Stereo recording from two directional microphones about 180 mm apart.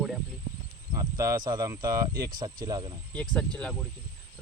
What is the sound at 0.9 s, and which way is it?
Speech, 20° right (ahead or behind).